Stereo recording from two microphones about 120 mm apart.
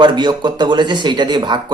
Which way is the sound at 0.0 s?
40° right (ahead or behind).